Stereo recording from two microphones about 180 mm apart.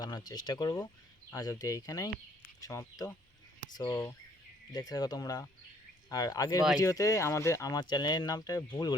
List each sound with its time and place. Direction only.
0.0 s speech: 20° left (ahead or behind)